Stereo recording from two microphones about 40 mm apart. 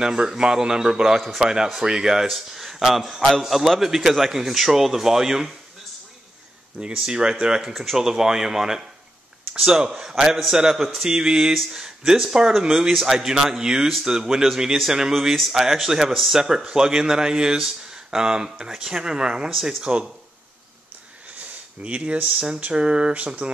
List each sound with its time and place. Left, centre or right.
0.0 s a man's voice: centre
7.1 s speech: centre
7.6 s speech: centre
19.5 s a man's voice: centre
19.8 s speech: right
21.8 s speech: right